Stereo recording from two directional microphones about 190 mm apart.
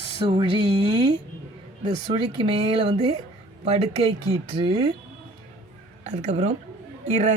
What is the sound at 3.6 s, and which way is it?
Speech, 35° right (ahead or behind).